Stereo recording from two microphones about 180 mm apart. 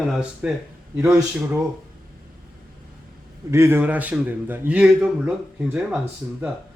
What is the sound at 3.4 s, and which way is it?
A man's voice, 15° right (ahead or behind).